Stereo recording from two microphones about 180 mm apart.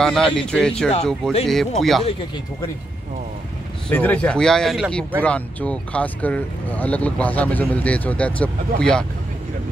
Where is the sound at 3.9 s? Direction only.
10° left (ahead or behind).